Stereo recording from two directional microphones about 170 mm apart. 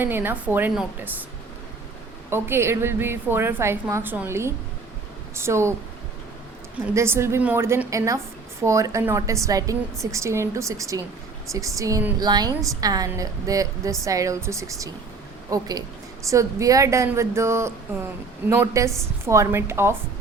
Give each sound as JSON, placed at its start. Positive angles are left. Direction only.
{"t": 0.0, "sound": "a woman's voice", "side_deg": -10}
{"t": 2.3, "sound": "a woman's voice", "side_deg": -15}
{"t": 6.9, "sound": "a woman's voice", "side_deg": -15}